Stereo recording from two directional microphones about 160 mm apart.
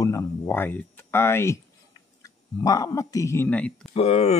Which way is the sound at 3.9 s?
40° left (ahead or behind).